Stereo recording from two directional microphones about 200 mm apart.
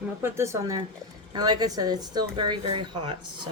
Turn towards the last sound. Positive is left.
turn(degrees=-25)  # may be behind; listen again after turning